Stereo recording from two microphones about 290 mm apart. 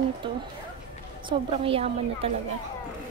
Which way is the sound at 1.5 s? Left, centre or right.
Centre.